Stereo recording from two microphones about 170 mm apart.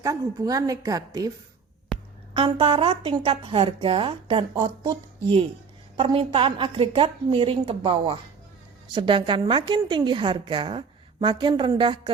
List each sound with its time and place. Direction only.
0.0 s a woman's voice: 20° right (ahead or behind)
1.9 s a sound: centre (ahead or behind)
2.3 s a woman's voice: 30° right (ahead or behind)